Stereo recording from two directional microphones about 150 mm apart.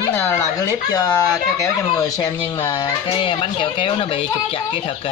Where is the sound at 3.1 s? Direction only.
35° left (ahead or behind).